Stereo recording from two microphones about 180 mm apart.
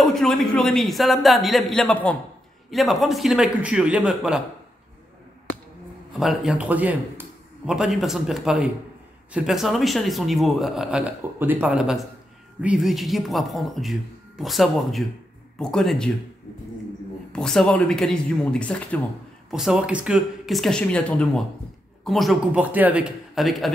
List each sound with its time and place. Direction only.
0.0 s speech: centre (ahead or behind)
6.1 s a man's voice: centre (ahead or behind)
17.3 s speech: 5° left (ahead or behind)